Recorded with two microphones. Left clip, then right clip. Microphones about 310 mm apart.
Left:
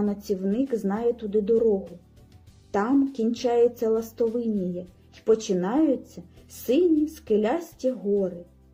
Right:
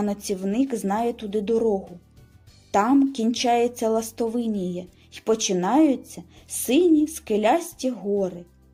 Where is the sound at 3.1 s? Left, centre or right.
Centre.